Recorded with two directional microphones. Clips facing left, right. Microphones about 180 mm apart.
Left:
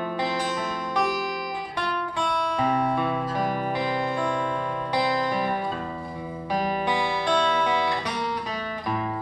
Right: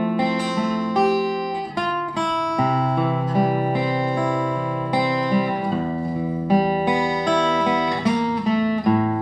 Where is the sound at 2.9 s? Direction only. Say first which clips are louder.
Right 5 dB; 10° right (ahead or behind).